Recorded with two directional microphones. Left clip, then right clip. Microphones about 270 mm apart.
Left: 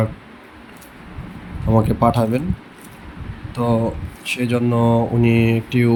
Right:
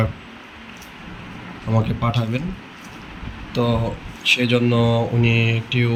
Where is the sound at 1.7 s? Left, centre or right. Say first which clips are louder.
Left 7 dB; centre.